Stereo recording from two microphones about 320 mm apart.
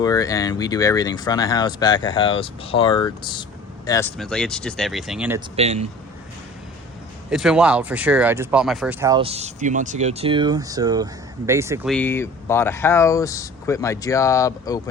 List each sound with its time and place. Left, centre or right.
0.0 s speech: centre
5.5 s speech: centre
7.3 s speech: centre